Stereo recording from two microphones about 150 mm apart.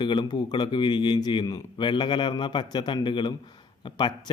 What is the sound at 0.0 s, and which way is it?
Speech, 30° left (ahead or behind).